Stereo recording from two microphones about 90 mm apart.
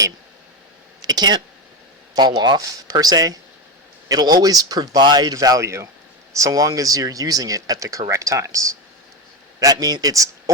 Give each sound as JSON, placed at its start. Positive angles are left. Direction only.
{"t": 1.0, "sound": "a man's voice", "side_deg": -50}